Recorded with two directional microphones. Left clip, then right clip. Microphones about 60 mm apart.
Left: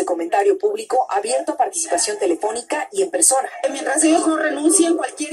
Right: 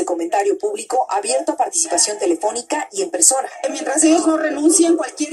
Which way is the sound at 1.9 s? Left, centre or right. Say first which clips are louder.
Right 1 dB; right.